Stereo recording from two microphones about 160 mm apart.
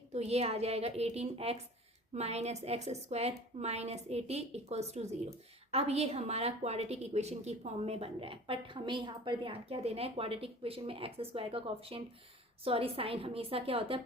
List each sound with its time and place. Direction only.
0.1 s a woman's voice: 40° right (ahead or behind)